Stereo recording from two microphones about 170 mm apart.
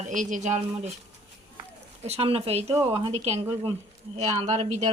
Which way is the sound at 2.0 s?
35° right (ahead or behind).